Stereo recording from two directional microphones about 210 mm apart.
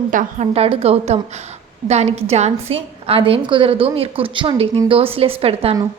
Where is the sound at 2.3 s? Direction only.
30° right (ahead or behind).